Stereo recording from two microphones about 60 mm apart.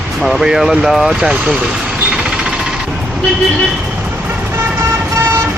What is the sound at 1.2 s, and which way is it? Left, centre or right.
Speech, centre.